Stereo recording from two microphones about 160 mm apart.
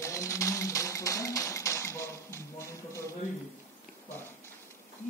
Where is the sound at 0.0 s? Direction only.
20° left (ahead or behind).